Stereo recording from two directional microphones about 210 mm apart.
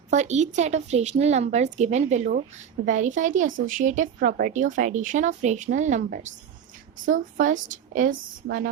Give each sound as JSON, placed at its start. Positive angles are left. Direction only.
{"t": 0.1, "sound": "a woman's voice", "side_deg": -35}